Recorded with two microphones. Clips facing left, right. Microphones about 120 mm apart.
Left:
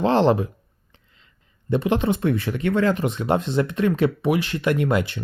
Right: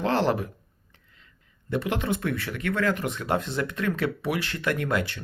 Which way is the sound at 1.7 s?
20° left (ahead or behind).